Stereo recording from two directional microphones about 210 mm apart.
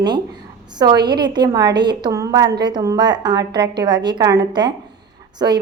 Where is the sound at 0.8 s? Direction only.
20° right (ahead or behind).